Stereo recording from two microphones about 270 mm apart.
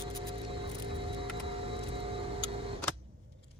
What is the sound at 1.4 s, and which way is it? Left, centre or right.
Vehicle, right.